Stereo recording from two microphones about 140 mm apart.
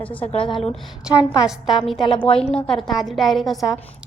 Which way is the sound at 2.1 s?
40° left (ahead or behind).